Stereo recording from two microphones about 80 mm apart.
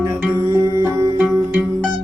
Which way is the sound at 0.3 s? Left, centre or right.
Right.